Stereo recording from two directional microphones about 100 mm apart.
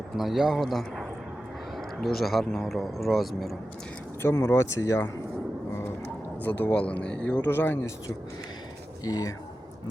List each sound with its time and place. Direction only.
0.2 s speech: centre (ahead or behind)
4.2 s speech: 30° left (ahead or behind)
6.4 s speech: 15° left (ahead or behind)
9.0 s speech: 35° left (ahead or behind)